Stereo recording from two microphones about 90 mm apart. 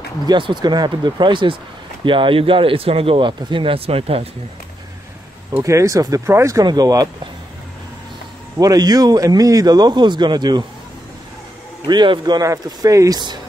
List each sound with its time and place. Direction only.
0.3 s speech: 60° right (ahead or behind); by 4.3 s 90° right
5.6 s speech: 35° right (ahead or behind)
6.6 s a man's voice: 50° right (ahead or behind)
8.5 s a man's voice: 45° right (ahead or behind)
11.8 s speech: 60° right (ahead or behind)
12.4 s speech: 40° right (ahead or behind)